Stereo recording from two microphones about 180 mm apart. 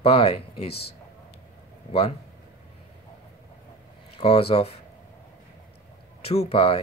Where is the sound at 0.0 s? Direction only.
30° left (ahead or behind).